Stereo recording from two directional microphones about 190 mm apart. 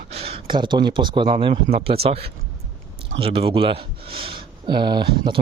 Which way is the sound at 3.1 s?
30° right (ahead or behind).